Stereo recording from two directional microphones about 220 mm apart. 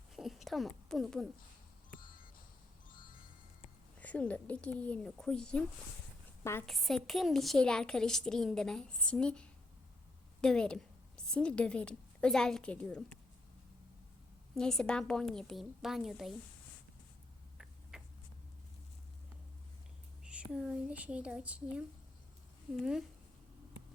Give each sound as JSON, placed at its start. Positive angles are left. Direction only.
{"t": 0.2, "sound": "a sound", "side_deg": 0}
{"t": 2.9, "sound": "music", "side_deg": 40}
{"t": 4.0, "sound": "a woman's voice", "side_deg": 5}
{"t": 14.5, "sound": "a woman's voice", "side_deg": 0}
{"t": 17.9, "sound": "a sound", "side_deg": -5}
{"t": 20.2, "sound": "a woman's voice", "side_deg": -5}